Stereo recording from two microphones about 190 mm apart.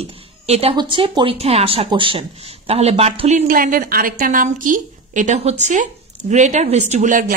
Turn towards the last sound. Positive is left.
turn(degrees=-40)  # may be behind; listen again after turning